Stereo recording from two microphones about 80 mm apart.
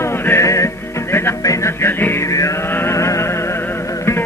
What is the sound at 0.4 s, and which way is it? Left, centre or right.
Music, left.